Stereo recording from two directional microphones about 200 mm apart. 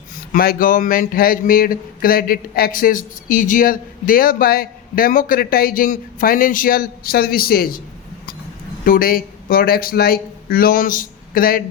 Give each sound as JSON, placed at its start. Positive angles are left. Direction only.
{"t": 0.3, "sound": "speech", "side_deg": 45}
{"t": 8.8, "sound": "a man's voice", "side_deg": 45}